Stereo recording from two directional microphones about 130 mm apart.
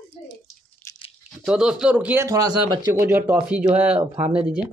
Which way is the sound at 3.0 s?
20° right (ahead or behind).